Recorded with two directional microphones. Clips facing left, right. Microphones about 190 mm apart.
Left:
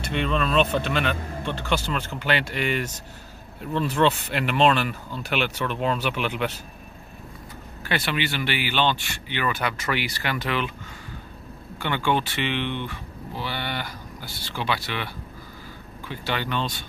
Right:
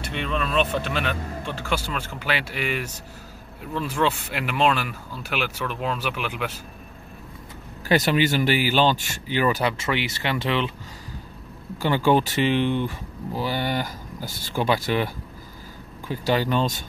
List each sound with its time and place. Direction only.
0.0 s speech: centre (ahead or behind)
7.9 s speech: 40° right (ahead or behind)
11.8 s speech: 35° right (ahead or behind)
16.1 s speech: 40° right (ahead or behind)